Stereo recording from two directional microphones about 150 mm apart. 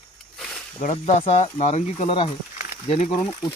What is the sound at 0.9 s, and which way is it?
Speech, 45° left (ahead or behind).